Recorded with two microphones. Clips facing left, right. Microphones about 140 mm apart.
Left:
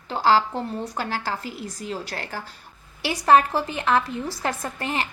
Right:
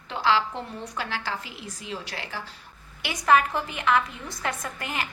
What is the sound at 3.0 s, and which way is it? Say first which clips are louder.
A woman's voice: left 4 dB; 35° left (ahead or behind).